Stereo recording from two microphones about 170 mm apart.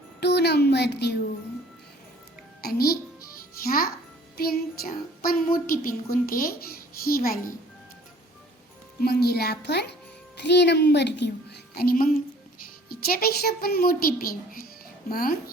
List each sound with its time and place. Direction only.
0.2 s a child's voice: 75° left (ahead or behind)
2.6 s a child's voice: 65° left (ahead or behind)
4.4 s speech: 65° left (ahead or behind)
9.0 s a child's voice: 70° left (ahead or behind)
10.3 s a woman's voice: 85° left; by 15.4 s 60° left (ahead or behind)